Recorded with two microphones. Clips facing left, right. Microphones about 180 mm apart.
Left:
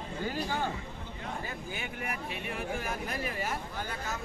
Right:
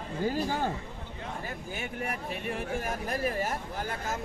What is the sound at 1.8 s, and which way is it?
Speech, 40° right (ahead or behind).